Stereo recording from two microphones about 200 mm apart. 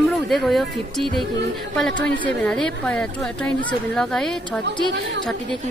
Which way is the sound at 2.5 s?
5° left (ahead or behind).